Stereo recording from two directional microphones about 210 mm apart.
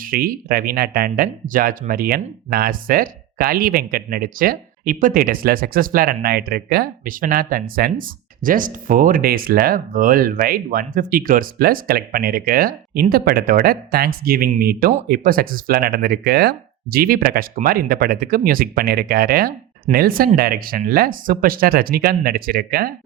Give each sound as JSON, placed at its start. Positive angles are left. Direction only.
{"t": 0.0, "sound": "speech", "side_deg": -45}